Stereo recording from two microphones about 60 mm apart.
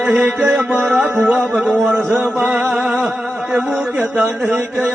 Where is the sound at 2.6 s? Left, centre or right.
Centre.